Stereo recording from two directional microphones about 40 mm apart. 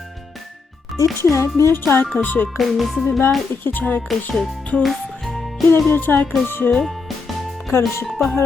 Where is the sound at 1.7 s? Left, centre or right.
Left.